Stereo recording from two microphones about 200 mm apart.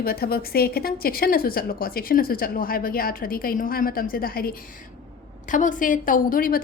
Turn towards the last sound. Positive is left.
turn(degrees=45)  # may be behind; listen again after turning